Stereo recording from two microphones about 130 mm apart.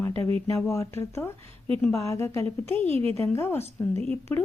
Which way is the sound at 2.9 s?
50° right (ahead or behind).